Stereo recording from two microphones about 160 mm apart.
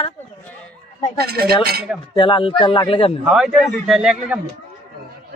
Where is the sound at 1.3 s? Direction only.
75° right (ahead or behind).